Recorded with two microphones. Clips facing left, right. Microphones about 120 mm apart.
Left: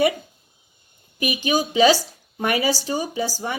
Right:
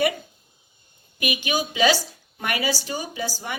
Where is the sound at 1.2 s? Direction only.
30° left (ahead or behind).